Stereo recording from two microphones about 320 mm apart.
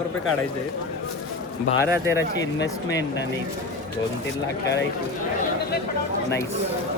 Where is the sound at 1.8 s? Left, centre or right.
Centre.